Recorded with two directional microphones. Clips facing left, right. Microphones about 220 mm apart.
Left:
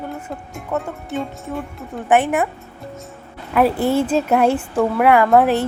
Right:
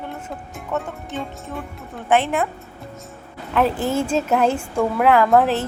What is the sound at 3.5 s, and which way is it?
Speech, 10° left (ahead or behind).